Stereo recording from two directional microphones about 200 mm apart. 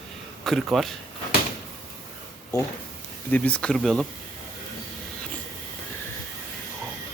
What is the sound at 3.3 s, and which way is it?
Speech, 5° left (ahead or behind).